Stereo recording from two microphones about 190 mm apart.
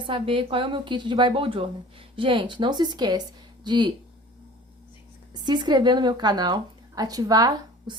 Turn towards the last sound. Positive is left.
turn(degrees=-20)  # may be behind; listen again after turning